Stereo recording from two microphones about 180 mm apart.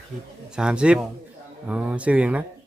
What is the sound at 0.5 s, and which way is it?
Speech, 5° right (ahead or behind).